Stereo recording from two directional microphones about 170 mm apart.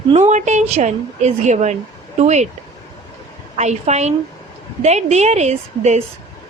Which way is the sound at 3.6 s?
40° right (ahead or behind).